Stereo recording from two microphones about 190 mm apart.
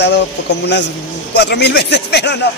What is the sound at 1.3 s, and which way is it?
Speech, 60° left (ahead or behind).